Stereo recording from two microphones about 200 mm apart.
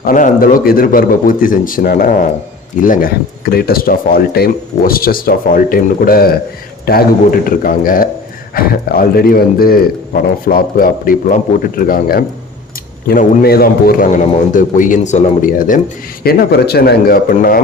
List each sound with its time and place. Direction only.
0.0 s a man's voice: 40° left (ahead or behind)